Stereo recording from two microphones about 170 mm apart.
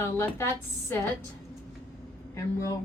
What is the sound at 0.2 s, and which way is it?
Speech, 15° left (ahead or behind).